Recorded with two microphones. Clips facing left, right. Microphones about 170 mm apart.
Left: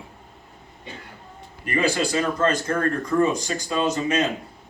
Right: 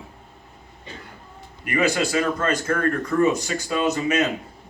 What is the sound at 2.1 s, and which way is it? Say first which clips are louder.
Speech: left 1 dB; 30° left (ahead or behind).